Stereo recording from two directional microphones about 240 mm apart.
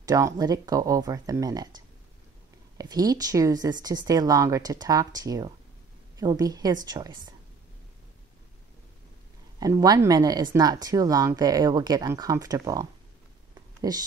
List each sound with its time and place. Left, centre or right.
0.0 s speech: centre
2.8 s speech: centre
9.6 s speech: centre